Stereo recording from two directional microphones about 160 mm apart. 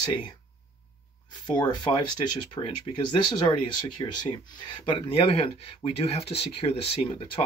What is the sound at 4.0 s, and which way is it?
Speech, 25° left (ahead or behind).